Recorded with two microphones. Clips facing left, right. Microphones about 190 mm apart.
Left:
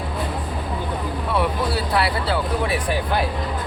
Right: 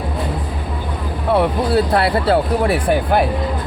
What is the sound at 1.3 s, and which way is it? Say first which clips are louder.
Speech: right 7 dB; 55° right (ahead or behind).